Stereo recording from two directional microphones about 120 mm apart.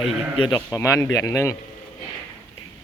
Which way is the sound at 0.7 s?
25° left (ahead or behind).